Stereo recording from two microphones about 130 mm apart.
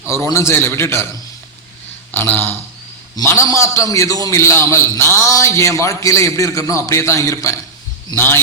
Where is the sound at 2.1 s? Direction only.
15° left (ahead or behind).